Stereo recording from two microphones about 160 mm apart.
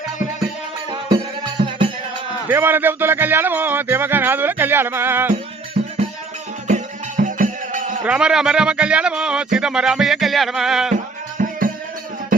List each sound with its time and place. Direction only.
2.5 s speech: 15° right (ahead or behind)
5.8 s music: 40° right (ahead or behind)
8.0 s speech: 5° right (ahead or behind)
11.4 s music: 55° right (ahead or behind)